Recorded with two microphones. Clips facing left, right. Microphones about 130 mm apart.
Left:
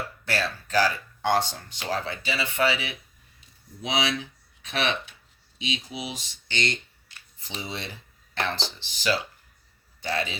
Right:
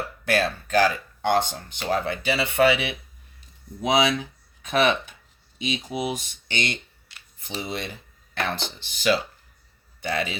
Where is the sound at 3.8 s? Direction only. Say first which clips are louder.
Right 6 dB; 45° right (ahead or behind).